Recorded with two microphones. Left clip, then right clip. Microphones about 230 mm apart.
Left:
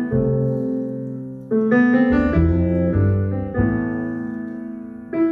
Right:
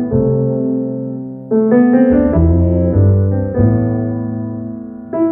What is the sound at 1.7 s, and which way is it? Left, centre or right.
Piano, left.